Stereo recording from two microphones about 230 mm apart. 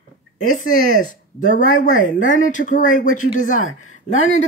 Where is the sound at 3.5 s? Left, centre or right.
Left.